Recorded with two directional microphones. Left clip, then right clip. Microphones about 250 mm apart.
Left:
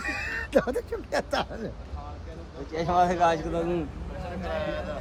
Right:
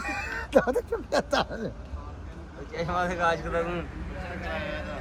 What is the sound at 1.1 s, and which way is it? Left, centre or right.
Speech, right.